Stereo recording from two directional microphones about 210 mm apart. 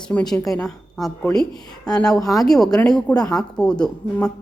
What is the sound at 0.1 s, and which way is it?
A woman's voice, 5° left (ahead or behind).